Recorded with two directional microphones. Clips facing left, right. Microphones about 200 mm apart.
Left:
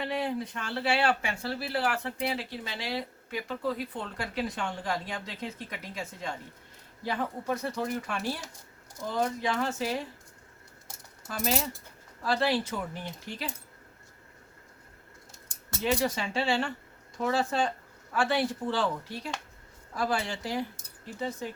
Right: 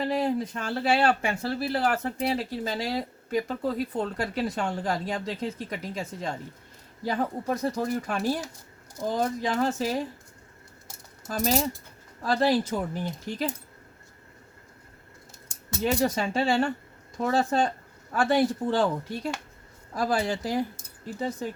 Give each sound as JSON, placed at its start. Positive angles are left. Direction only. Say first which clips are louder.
{"t": 0.0, "sound": "speech", "louder": "right 5 dB", "side_deg": -40}
{"t": 11.3, "sound": "speech", "louder": "right 5 dB", "side_deg": -40}
{"t": 15.8, "sound": "speech", "louder": "right 3 dB", "side_deg": -45}